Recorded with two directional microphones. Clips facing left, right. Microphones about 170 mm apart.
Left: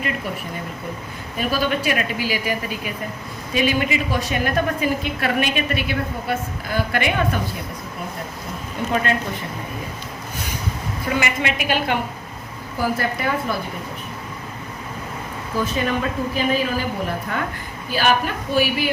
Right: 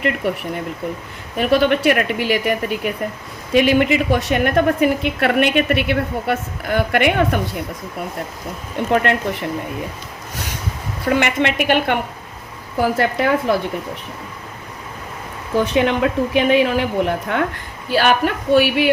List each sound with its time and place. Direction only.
0.2 s a woman's voice: 70° right (ahead or behind)
8.9 s a woman's voice: 65° right (ahead or behind)
11.2 s a woman's voice: 65° right (ahead or behind)
15.5 s a woman's voice: 75° right (ahead or behind)